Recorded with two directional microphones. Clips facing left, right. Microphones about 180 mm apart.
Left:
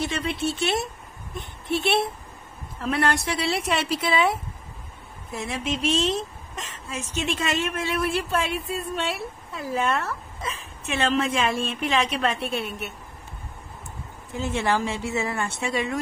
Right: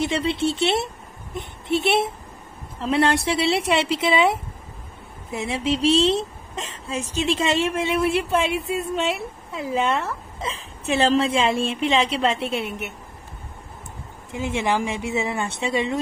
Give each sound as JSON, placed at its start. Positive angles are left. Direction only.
{"t": 0.0, "sound": "speech", "side_deg": -25}
{"t": 10.9, "sound": "speech", "side_deg": -30}
{"t": 14.3, "sound": "speech", "side_deg": -15}